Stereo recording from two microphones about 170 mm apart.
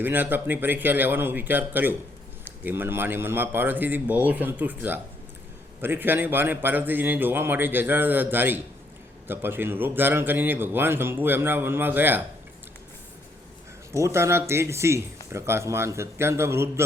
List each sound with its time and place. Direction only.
0.0 s a man's voice: 10° right (ahead or behind)
13.9 s a man's voice: 15° right (ahead or behind)